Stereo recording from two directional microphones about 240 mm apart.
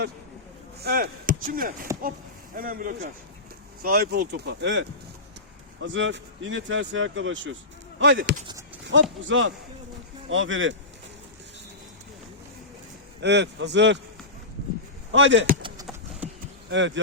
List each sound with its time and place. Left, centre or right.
0.8 s speech: right
8.2 s speech: right
8.8 s a sound: right
9.2 s speech: right
13.2 s speech: right
15.1 s speech: right
15.6 s clip-clop: centre
16.6 s speech: right